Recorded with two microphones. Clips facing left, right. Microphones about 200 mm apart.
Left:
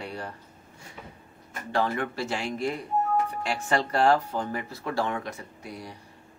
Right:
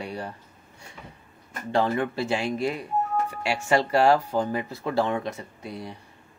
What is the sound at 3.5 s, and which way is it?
Speech, 10° right (ahead or behind).